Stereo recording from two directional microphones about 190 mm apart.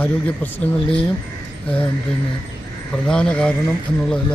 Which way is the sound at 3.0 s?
5° left (ahead or behind).